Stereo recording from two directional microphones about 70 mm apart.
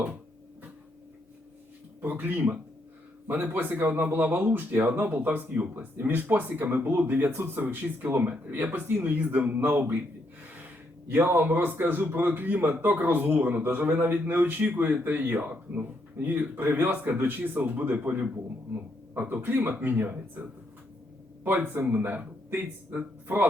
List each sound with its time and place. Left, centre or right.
2.0 s speech: right
11.1 s speech: right